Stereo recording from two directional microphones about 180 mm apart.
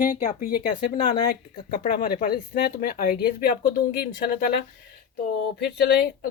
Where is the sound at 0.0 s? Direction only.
40° left (ahead or behind).